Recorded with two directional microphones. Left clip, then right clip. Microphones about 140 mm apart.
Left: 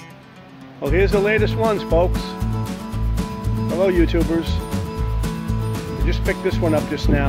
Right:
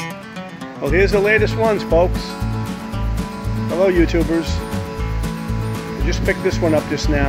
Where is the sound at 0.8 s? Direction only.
Centre (ahead or behind).